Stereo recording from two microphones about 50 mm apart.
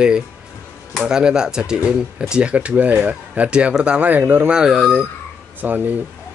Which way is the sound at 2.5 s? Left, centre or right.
Right.